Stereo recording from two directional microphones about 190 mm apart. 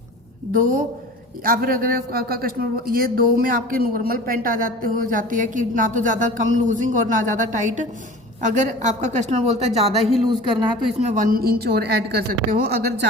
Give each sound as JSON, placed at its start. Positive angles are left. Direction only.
{"t": 0.5, "sound": "a man's voice", "side_deg": -45}
{"t": 10.0, "sound": "speech", "side_deg": 0}
{"t": 10.2, "sound": "speech", "side_deg": -25}
{"t": 11.0, "sound": "a man's voice", "side_deg": -40}